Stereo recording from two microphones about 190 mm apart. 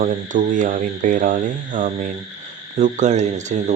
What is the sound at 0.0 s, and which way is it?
Speech, 45° right (ahead or behind).